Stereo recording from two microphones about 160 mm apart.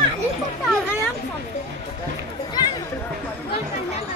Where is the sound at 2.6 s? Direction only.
25° left (ahead or behind).